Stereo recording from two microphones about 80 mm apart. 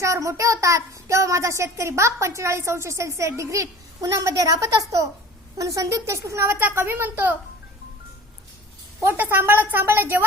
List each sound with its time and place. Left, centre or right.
0.0 s a child's voice: right
9.1 s a woman's voice: right